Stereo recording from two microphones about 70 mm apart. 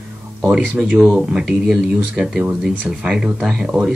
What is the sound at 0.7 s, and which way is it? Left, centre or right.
Speech, centre.